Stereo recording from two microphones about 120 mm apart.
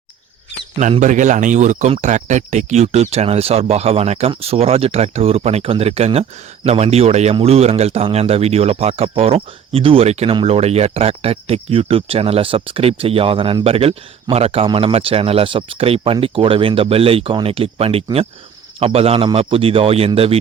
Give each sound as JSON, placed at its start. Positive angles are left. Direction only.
{"t": 0.8, "sound": "speech", "side_deg": -90}